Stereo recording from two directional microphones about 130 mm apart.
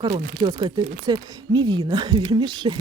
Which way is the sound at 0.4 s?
30° right (ahead or behind).